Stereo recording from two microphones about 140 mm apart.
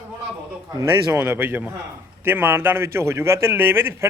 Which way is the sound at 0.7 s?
20° right (ahead or behind).